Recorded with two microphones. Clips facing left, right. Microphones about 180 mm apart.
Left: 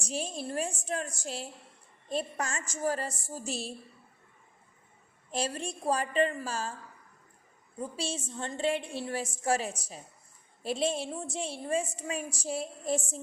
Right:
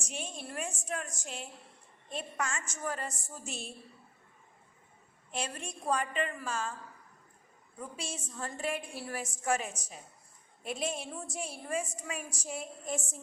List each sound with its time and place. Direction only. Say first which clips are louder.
0.0 s a woman's voice: left 6 dB; 35° left (ahead or behind)
5.3 s a woman's voice: left 5 dB; 35° left (ahead or behind)
7.8 s a woman's voice: left 6 dB; 30° left (ahead or behind)